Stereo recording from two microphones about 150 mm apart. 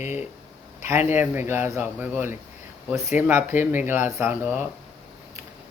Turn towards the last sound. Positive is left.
turn(degrees=-15)  # may be behind; listen again after turning